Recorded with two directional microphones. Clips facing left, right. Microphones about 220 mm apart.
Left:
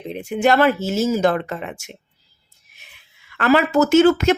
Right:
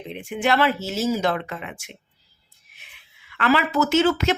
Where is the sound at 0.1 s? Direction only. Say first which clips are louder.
Left 5 dB; 40° left (ahead or behind).